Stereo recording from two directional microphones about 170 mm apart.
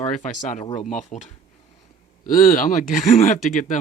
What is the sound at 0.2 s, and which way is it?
Speech, 45° left (ahead or behind).